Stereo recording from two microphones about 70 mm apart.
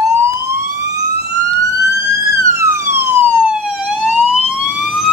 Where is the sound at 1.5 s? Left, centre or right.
Right.